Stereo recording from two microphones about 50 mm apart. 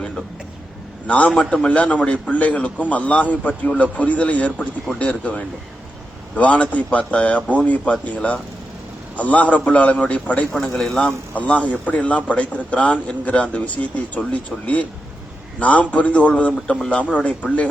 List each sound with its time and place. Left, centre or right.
1.0 s a man's voice: left
10.8 s a man's voice: centre
11.0 s a man's voice: left
15.5 s a man's voice: left